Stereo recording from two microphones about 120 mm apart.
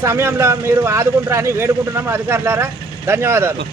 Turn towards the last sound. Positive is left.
turn(degrees=-20)  # may be behind; listen again after turning